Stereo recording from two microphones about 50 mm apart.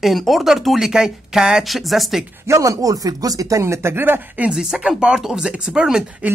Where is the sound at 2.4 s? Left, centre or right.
Right.